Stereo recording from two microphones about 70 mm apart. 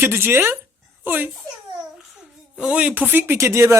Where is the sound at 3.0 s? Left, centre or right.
Right.